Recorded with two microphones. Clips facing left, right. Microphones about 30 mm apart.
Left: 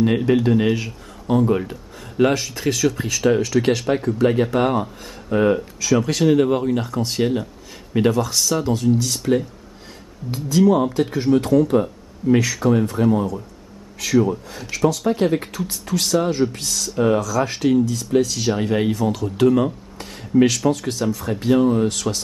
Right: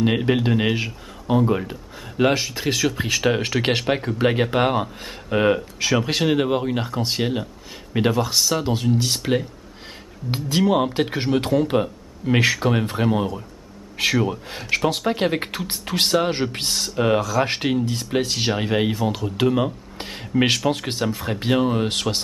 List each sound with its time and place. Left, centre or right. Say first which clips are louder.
0.0 s speech: left 3 dB; right
8.9 s speech: left 2 dB; right
10.6 s speech: left 3 dB; right
18.5 s speech: left 1 dB; right
20.0 s speech: left 5 dB; right